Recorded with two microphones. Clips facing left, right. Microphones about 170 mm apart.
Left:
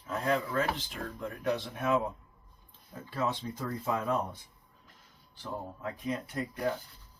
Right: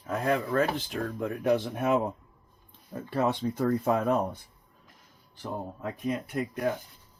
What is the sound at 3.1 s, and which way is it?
Speech, 60° right (ahead or behind).